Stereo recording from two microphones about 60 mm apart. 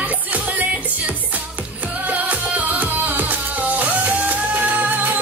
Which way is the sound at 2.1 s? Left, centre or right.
Right.